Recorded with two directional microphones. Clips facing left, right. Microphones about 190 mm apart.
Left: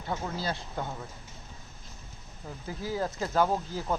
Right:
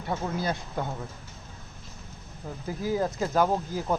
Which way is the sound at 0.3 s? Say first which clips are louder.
Right 4 dB; 20° right (ahead or behind).